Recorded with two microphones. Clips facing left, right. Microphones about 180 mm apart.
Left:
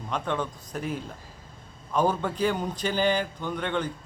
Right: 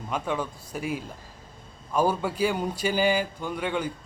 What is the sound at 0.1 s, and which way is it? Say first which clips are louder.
A man's voice: even; 10° right (ahead or behind).